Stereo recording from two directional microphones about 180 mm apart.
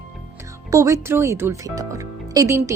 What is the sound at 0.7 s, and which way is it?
A woman's voice, 15° right (ahead or behind).